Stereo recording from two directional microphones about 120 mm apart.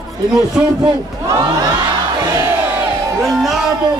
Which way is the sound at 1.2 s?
30° right (ahead or behind).